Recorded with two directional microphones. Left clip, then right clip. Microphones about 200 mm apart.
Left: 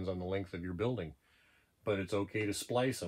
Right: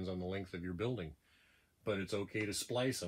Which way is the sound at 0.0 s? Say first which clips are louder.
Left 4 dB; 30° left (ahead or behind).